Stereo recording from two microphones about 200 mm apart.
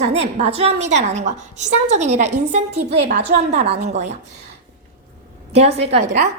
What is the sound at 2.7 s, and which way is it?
Speech, 50° right (ahead or behind).